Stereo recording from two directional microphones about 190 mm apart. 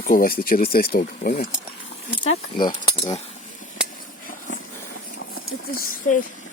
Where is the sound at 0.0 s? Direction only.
50° left (ahead or behind).